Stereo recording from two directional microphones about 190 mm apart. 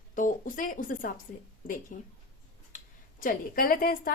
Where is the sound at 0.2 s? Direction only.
45° left (ahead or behind).